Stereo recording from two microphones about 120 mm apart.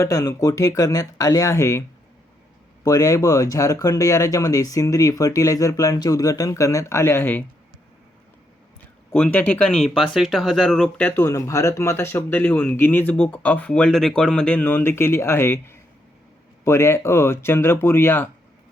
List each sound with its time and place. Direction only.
0.0 s speech: 30° left (ahead or behind)
2.8 s speech: 30° left (ahead or behind)
9.1 s speech: 15° left (ahead or behind)